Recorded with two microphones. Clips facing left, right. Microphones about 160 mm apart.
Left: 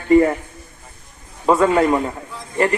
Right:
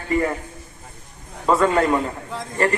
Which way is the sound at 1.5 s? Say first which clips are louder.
Left 3 dB; 25° left (ahead or behind).